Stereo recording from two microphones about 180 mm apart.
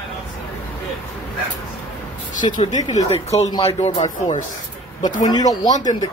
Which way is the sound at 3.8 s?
40° left (ahead or behind).